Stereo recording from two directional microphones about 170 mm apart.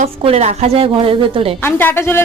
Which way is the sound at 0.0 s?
35° right (ahead or behind).